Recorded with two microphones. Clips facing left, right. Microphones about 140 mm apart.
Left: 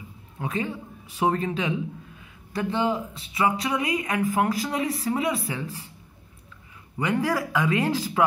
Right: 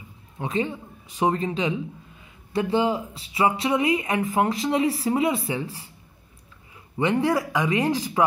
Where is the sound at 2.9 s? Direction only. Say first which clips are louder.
Right 1 dB; 30° right (ahead or behind).